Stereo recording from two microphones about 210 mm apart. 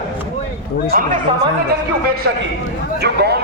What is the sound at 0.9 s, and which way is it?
Speech, 40° right (ahead or behind).